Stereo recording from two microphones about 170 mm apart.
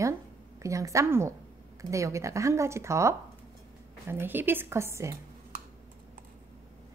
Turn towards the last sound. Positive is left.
turn(degrees=-15)  # may be behind; listen again after turning